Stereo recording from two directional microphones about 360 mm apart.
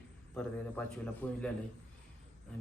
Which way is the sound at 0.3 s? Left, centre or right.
Centre.